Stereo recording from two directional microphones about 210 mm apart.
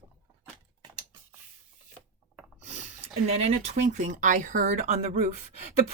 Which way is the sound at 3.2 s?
30° right (ahead or behind).